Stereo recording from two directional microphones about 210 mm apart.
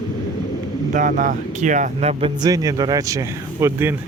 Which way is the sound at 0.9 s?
40° right (ahead or behind).